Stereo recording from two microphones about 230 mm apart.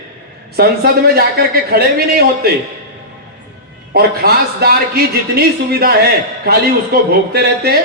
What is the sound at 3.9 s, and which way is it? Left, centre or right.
A man's voice, right.